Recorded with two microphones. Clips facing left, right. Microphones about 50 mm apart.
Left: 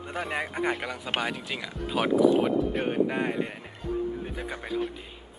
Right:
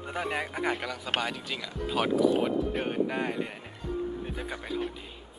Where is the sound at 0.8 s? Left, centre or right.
Centre.